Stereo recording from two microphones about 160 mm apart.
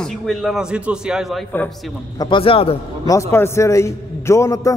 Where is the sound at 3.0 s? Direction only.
20° left (ahead or behind).